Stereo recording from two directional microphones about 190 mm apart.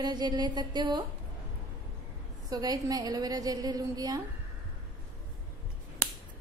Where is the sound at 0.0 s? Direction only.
20° right (ahead or behind).